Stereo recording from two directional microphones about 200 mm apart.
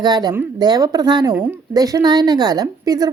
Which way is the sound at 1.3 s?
10° right (ahead or behind).